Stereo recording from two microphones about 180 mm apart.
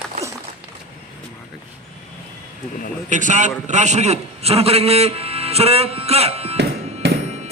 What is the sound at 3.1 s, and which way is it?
A man's voice, 45° right (ahead or behind).